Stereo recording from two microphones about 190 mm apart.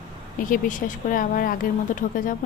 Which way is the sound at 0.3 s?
45° left (ahead or behind).